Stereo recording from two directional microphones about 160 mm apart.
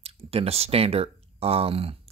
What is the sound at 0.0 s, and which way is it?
Speech, 35° right (ahead or behind).